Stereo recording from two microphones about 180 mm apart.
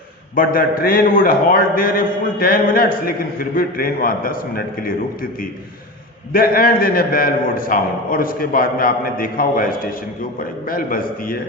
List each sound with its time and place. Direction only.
0.3 s a man's voice: 50° left (ahead or behind)
6.3 s a man's voice: 55° left (ahead or behind)